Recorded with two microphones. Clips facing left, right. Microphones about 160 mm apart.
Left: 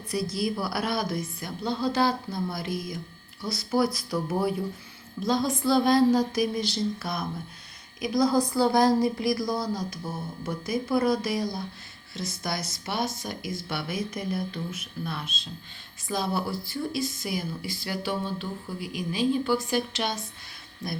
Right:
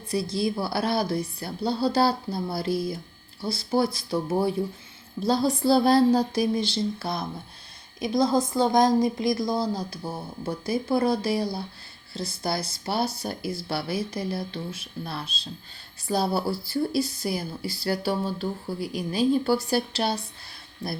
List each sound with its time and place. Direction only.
0.1 s a woman's voice: 25° right (ahead or behind)